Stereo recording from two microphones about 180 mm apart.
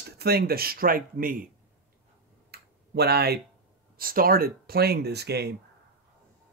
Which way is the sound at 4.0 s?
55° right (ahead or behind).